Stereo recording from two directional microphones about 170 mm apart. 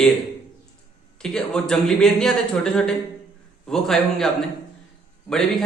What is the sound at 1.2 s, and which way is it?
A man's voice, 5° left (ahead or behind).